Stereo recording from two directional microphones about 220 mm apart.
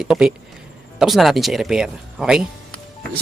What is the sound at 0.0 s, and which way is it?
Speech, 5° right (ahead or behind).